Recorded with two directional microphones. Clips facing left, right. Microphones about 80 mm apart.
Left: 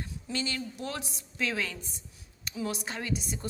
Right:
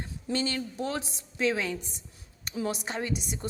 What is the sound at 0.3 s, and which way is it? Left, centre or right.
A woman's voice, right.